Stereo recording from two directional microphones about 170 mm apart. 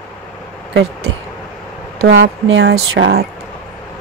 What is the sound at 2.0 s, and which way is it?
Speech, 85° right.